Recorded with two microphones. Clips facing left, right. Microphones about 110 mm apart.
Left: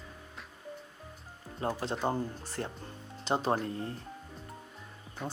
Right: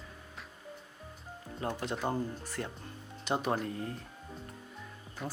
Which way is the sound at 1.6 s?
30° left (ahead or behind).